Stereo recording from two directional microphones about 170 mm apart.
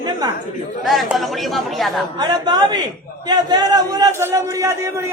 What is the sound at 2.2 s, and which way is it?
A man's voice, 25° right (ahead or behind).